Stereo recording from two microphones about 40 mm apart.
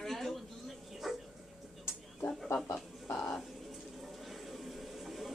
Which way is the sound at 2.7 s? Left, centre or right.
Left.